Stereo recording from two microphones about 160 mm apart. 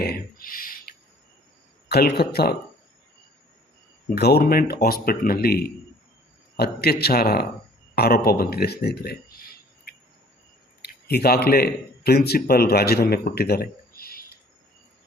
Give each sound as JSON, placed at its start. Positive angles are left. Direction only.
{"t": 0.0, "sound": "a sound", "side_deg": 70}
{"t": 1.9, "sound": "speech", "side_deg": 80}
{"t": 4.1, "sound": "speech", "side_deg": 85}
{"t": 6.6, "sound": "a man's voice", "side_deg": 85}